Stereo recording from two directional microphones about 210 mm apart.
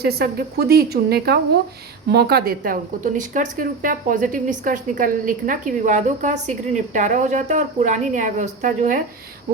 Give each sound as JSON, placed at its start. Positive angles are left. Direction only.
{"t": 0.0, "sound": "a woman's voice", "side_deg": -50}